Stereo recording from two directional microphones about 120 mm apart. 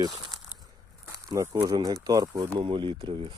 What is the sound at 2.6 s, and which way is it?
Speech, 45° right (ahead or behind).